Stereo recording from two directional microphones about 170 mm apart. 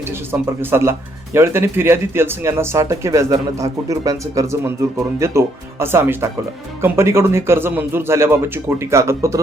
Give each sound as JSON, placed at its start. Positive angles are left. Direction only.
{"t": 0.3, "sound": "speech", "side_deg": -15}